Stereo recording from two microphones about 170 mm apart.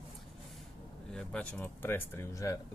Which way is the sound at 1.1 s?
5° left (ahead or behind).